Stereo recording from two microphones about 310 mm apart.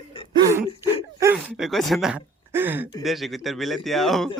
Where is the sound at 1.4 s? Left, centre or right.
Centre.